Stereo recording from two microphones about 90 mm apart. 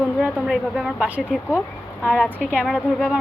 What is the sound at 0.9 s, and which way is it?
Speech, 15° right (ahead or behind).